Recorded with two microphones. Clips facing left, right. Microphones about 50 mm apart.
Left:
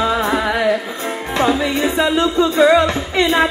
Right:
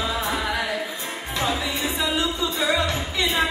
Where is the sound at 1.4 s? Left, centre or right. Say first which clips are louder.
Left 9 dB; left.